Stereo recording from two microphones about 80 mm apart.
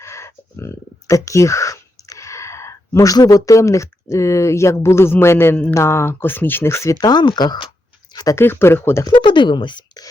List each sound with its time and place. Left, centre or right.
0.0 s speech: left
7.0 s speech: left
8.4 s speech: left
9.1 s speech: left